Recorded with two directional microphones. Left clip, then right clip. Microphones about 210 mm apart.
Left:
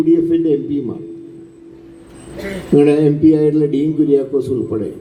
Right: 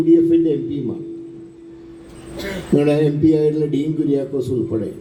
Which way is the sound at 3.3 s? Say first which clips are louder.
Left 3 dB; 55° left (ahead or behind).